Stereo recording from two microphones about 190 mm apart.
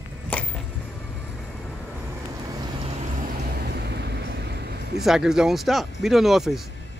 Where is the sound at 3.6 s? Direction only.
60° right (ahead or behind).